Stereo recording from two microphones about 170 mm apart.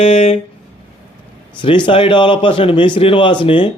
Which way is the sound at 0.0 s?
40° left (ahead or behind).